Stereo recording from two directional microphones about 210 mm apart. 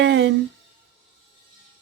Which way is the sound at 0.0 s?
55° right (ahead or behind).